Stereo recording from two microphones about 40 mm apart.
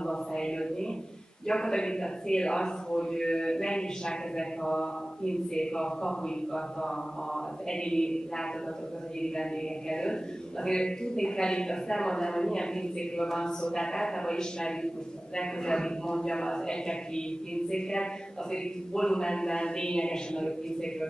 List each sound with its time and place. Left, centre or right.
0.0 s a man's voice: centre